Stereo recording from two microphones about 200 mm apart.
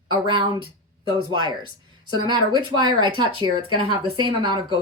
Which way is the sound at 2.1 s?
20° right (ahead or behind).